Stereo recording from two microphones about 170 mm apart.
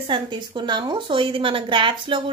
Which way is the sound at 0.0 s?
30° right (ahead or behind).